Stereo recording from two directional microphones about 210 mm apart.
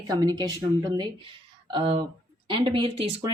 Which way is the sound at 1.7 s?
25° right (ahead or behind).